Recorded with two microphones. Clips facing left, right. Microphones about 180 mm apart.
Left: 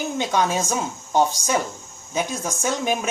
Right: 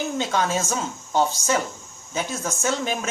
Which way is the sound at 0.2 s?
15° left (ahead or behind).